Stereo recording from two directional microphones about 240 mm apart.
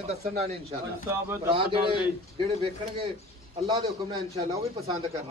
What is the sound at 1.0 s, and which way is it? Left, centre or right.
Speech, centre.